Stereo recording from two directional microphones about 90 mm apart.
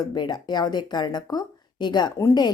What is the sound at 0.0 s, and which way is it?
Speech, 55° left (ahead or behind).